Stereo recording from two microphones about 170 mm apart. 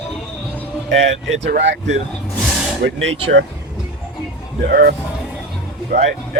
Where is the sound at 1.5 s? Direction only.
75° right (ahead or behind).